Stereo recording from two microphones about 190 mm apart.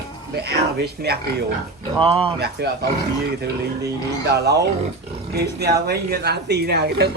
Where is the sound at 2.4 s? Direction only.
60° right (ahead or behind).